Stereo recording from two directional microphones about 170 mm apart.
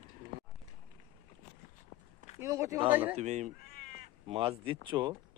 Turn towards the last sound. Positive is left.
turn(degrees=-25)  # may be behind; listen again after turning